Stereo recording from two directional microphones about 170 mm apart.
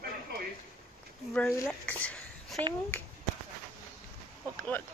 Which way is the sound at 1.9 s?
10° left (ahead or behind).